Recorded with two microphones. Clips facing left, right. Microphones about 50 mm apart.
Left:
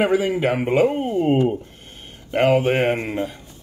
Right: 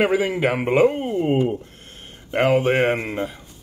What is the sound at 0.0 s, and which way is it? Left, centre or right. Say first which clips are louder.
A man's voice: even; centre.